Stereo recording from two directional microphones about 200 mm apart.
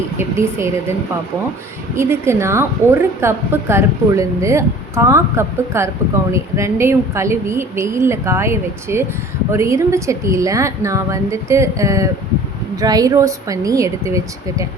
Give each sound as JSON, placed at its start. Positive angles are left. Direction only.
{"t": 0.2, "sound": "a woman's voice", "side_deg": -15}
{"t": 2.0, "sound": "a woman's voice", "side_deg": -15}